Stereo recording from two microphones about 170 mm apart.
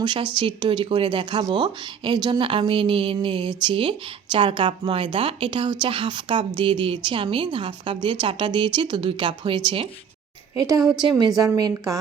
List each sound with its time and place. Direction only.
0.0 s speech: 30° right (ahead or behind)
10.5 s speech: 20° right (ahead or behind)